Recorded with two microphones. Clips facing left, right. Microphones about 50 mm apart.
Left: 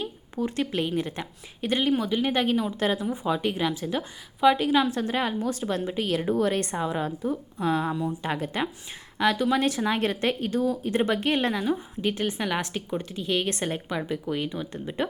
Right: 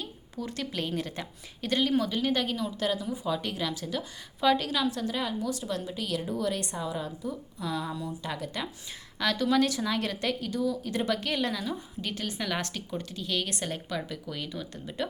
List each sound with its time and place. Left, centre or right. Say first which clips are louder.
0.0 s a sound: left 7 dB; left
1.0 s speech: left 4 dB; left
4.4 s a woman's voice: left 5 dB; centre
4.8 s a woman's voice: left 5 dB; left
9.1 s speech: left 3 dB; left